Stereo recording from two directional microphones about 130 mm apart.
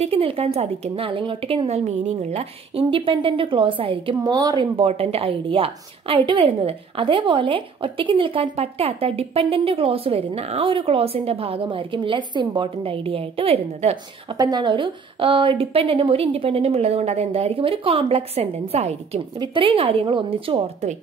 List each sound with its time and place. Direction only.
0.0 s a woman's voice: 45° right (ahead or behind); by 4.6 s 30° right (ahead or behind)
4.7 s a woman's voice: 50° right (ahead or behind)
14.3 s a woman's voice: 30° right (ahead or behind); by 19.2 s 50° right (ahead or behind)
19.3 s a woman's voice: 40° right (ahead or behind)